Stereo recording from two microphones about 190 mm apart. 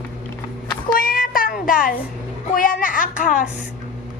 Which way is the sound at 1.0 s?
50° left (ahead or behind).